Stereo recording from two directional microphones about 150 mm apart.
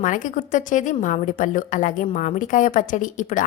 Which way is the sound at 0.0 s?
60° left (ahead or behind).